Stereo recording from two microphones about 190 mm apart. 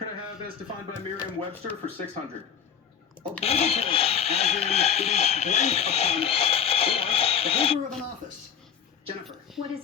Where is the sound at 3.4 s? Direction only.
35° left (ahead or behind).